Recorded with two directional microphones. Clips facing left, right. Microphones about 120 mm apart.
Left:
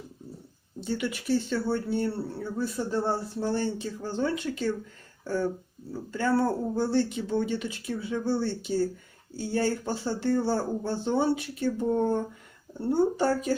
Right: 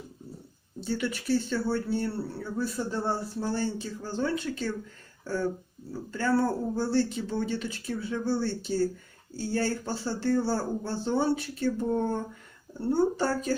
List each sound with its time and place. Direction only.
0.8 s speech: 20° left (ahead or behind)